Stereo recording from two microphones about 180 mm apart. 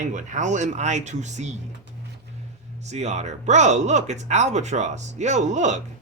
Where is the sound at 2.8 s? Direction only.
40° right (ahead or behind).